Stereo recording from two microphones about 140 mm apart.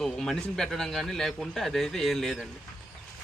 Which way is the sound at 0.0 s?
5° left (ahead or behind).